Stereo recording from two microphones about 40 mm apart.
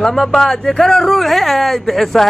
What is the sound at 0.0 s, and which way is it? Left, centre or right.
Speech, centre.